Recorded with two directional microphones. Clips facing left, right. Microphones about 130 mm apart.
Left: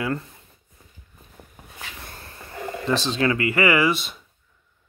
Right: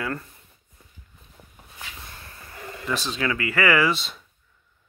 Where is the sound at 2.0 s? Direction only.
35° left (ahead or behind).